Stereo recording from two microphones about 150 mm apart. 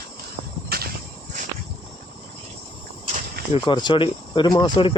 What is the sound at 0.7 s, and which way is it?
Walk, 90° right.